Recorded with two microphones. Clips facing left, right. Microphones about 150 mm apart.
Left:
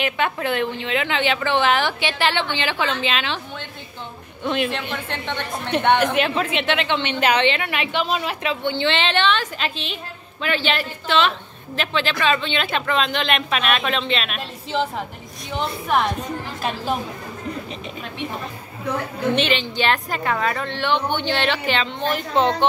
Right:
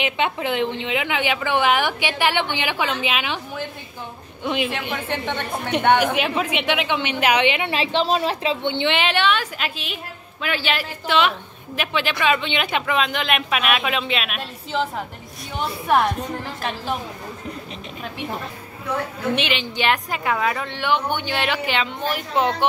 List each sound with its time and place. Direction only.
0.0 s a woman's voice: 15° right (ahead or behind)
7.6 s a woman's voice: 30° right (ahead or behind); by 16.1 s 5° right (ahead or behind)
19.3 s a woman's voice: 10° right (ahead or behind)